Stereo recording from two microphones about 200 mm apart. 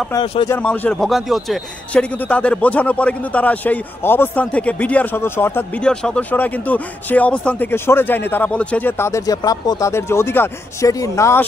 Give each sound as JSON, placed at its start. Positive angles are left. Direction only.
{"t": 0.1, "sound": "speech", "side_deg": 25}
{"t": 0.5, "sound": "a man's voice", "side_deg": 5}